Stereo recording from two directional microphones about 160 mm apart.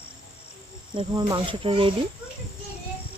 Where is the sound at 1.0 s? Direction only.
30° right (ahead or behind).